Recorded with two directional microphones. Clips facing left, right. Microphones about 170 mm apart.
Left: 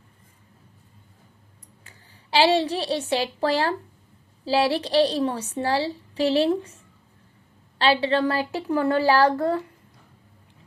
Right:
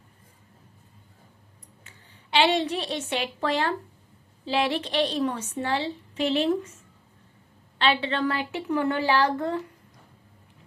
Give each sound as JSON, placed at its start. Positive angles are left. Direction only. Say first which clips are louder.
{"t": 1.8, "sound": "a woman's voice", "louder": "left 1 dB", "side_deg": 35}